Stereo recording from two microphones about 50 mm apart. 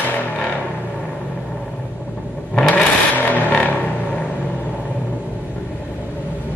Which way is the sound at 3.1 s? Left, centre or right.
Left.